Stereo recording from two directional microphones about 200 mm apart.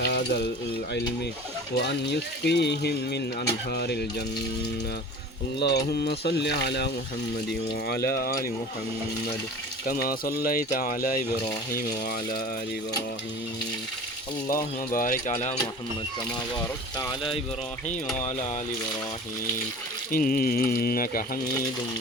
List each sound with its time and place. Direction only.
0.0 s speech: 55° left (ahead or behind)
2.4 s speech: 55° left (ahead or behind)
5.5 s speech: 55° left (ahead or behind)
9.8 s speech: 45° left (ahead or behind)
14.4 s speech: 45° left (ahead or behind)
20.1 s speech: 45° left (ahead or behind)